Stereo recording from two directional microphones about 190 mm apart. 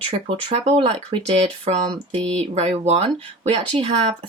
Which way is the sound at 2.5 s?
35° right (ahead or behind).